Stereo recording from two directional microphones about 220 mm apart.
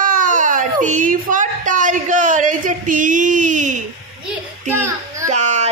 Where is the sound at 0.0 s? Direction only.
40° right (ahead or behind).